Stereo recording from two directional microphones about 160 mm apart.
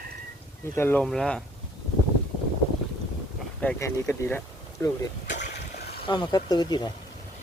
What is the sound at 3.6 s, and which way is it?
Speech, 15° left (ahead or behind).